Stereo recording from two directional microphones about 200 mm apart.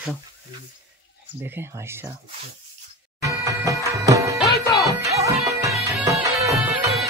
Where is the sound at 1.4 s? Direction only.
10° right (ahead or behind).